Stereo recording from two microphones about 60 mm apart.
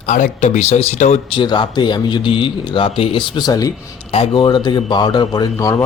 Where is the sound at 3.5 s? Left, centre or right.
Left.